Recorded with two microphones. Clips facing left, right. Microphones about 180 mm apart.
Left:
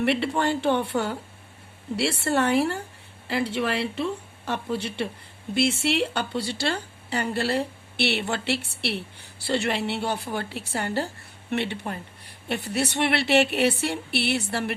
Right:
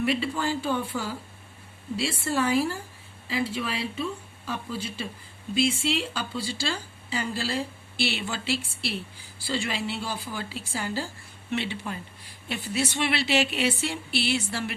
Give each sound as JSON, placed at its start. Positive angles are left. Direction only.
{"t": 0.0, "sound": "a woman's voice", "side_deg": 65}